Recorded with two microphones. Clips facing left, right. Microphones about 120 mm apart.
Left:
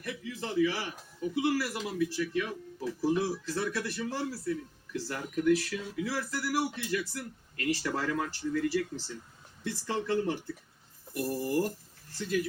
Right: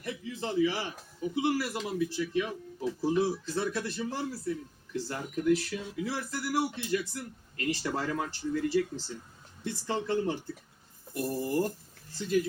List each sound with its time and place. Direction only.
0.0 s a man's voice: 20° right (ahead or behind)